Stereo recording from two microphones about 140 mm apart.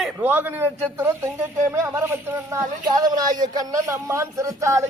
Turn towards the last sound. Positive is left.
turn(degrees=-20)  # may be behind; listen again after turning